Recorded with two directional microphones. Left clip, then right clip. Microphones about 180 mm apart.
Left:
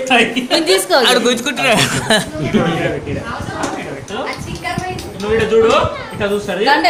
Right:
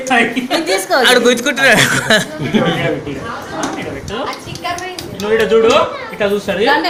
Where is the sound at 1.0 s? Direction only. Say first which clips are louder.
Right 3 dB; 10° right (ahead or behind).